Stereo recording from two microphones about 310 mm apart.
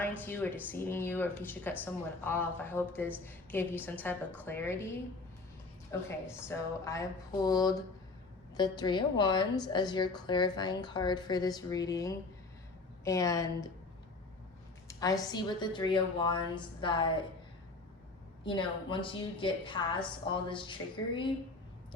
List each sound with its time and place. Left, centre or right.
0.3 s a woman's voice: centre
6.1 s a woman's voice: centre
14.8 s a woman's voice: centre
18.4 s a woman's voice: centre